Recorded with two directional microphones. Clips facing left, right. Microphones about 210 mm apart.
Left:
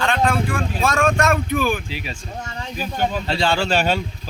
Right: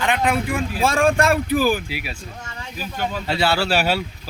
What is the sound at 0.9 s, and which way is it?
Speech, 30° right (ahead or behind).